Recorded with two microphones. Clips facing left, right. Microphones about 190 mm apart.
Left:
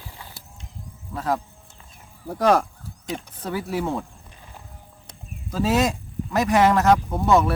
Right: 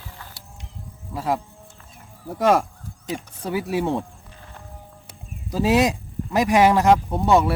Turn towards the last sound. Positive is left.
turn(degrees=-15)  # may be behind; listen again after turning